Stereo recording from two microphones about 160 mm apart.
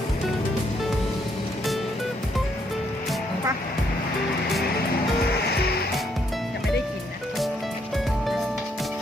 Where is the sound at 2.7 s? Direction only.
Centre (ahead or behind).